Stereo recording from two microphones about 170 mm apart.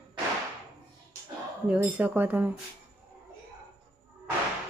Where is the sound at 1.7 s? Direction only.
10° right (ahead or behind).